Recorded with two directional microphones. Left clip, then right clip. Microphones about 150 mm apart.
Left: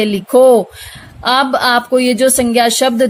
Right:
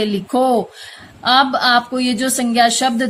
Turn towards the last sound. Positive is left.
turn(degrees=45)  # may be behind; listen again after turning